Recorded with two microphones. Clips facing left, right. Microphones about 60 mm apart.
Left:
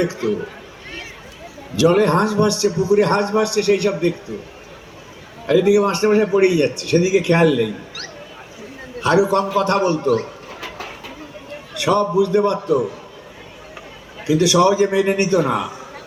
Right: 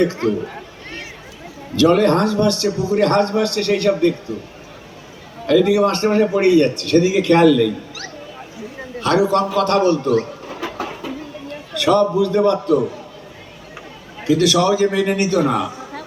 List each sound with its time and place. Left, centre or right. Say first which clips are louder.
0.0 s a man's voice: right 2 dB; centre
1.7 s a man's voice: right 1 dB; centre
5.5 s a man's voice: even; centre
9.0 s a man's voice: even; centre
11.7 s a man's voice: right 2 dB; centre
14.3 s speech: left 1 dB; centre